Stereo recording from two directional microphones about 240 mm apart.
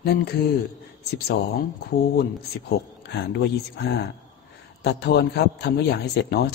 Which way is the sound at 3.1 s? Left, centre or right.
Left.